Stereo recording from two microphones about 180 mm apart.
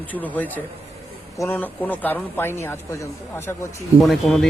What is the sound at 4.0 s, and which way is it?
Speech, centre (ahead or behind).